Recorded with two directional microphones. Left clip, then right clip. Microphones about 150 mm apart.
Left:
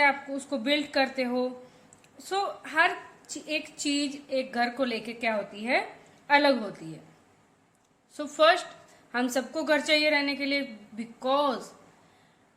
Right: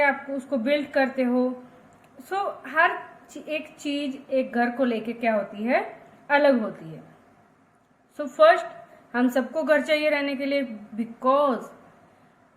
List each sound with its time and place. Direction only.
0.0 s a woman's voice: 30° left (ahead or behind)
8.1 s a woman's voice: 30° left (ahead or behind)